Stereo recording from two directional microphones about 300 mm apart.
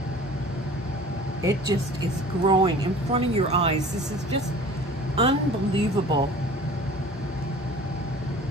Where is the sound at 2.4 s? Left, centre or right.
Centre.